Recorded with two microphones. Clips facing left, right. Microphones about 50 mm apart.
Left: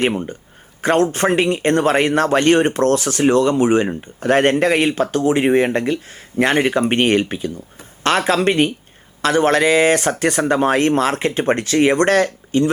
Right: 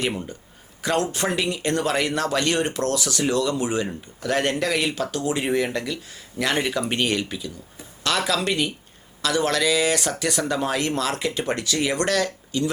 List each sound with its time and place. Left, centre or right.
0.0 s speech: left